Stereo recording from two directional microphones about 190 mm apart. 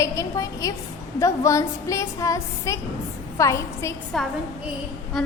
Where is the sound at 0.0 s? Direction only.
15° left (ahead or behind).